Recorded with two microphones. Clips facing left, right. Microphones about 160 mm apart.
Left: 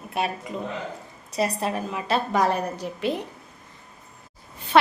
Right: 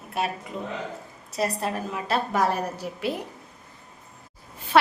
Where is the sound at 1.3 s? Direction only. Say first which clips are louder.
Left 2 dB; centre (ahead or behind).